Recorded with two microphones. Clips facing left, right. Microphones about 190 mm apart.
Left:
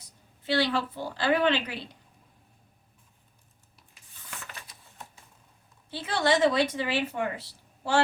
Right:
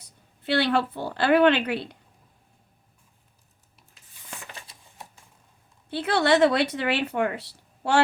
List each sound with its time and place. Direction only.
0.4 s speech: 60° right (ahead or behind)
5.9 s speech: 65° right (ahead or behind)